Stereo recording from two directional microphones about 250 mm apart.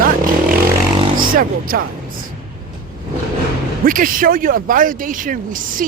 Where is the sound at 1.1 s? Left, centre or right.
Right.